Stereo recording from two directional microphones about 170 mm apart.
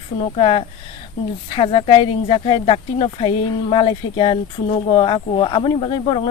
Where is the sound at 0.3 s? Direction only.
35° left (ahead or behind).